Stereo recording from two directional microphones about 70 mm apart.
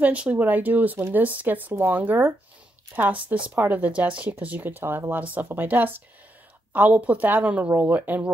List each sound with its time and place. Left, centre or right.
0.0 s speech: right